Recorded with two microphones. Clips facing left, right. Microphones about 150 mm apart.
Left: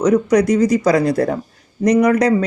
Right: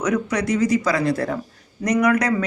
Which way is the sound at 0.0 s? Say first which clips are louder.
Left 8 dB; 35° left (ahead or behind).